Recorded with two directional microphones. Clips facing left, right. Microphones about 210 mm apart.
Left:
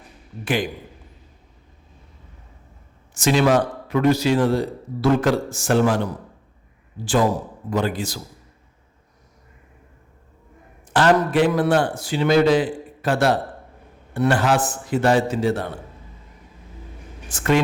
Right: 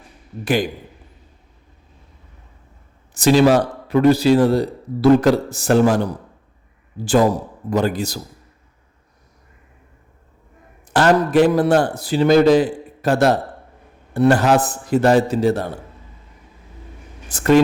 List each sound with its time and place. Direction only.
3.2 s a man's voice: 35° right (ahead or behind)
10.8 s a man's voice: 40° right (ahead or behind)
17.2 s speech: 40° right (ahead or behind)